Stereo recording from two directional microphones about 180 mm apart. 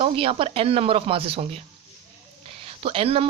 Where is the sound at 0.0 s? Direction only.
30° right (ahead or behind).